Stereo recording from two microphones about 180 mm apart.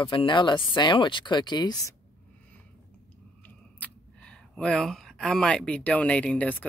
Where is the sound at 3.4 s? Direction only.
5° left (ahead or behind).